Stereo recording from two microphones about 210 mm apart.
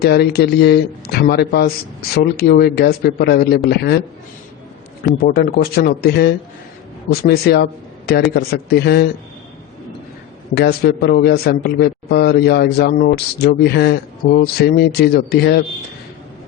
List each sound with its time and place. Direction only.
0.0 s a man's voice: 50° left (ahead or behind)
5.2 s a man's voice: 45° left (ahead or behind)
10.5 s a man's voice: 50° left (ahead or behind)